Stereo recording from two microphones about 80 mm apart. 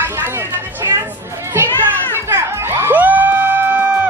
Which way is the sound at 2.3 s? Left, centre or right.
Right.